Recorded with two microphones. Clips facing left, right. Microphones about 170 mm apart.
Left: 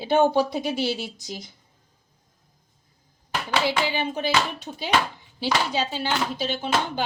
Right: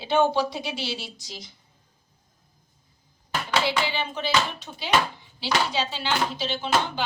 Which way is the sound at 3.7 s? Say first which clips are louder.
Left 2 dB; 45° left (ahead or behind).